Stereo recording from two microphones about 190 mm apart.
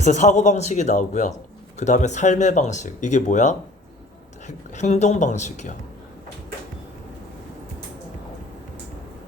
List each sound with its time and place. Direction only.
0.0 s speech: 40° left (ahead or behind)